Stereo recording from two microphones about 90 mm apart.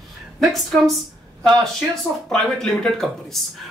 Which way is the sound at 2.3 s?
10° left (ahead or behind).